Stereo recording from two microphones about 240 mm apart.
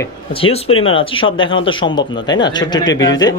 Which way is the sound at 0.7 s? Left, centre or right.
Left.